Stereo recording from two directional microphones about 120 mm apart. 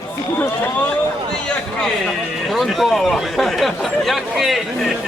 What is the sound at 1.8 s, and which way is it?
Speech, centre (ahead or behind).